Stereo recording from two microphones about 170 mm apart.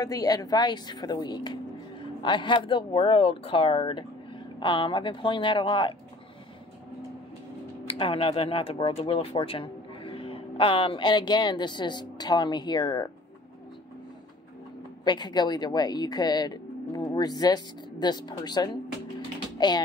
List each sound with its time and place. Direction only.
0.0 s speech: 20° left (ahead or behind)
7.8 s speech: 35° left (ahead or behind)
15.0 s speech: 25° left (ahead or behind)